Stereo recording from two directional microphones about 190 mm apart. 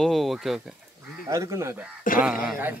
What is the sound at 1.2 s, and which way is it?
Speech, 15° right (ahead or behind).